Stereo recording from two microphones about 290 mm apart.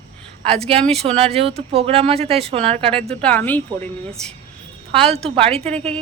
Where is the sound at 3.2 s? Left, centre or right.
Centre.